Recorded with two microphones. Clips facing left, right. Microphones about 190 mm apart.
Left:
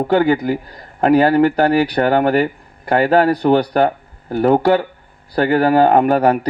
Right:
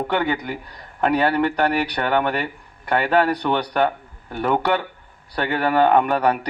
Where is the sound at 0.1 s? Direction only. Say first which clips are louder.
Left 8 dB; 35° left (ahead or behind).